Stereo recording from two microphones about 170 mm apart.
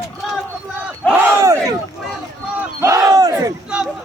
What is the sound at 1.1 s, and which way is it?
Battle cry, 10° right (ahead or behind).